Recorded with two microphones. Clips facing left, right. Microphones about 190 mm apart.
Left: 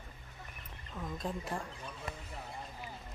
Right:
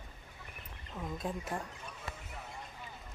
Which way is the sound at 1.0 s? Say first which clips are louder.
Right 1 dB; 5° right (ahead or behind).